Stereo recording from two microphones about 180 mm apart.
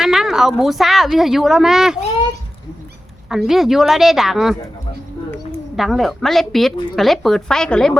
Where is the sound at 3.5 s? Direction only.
Centre (ahead or behind).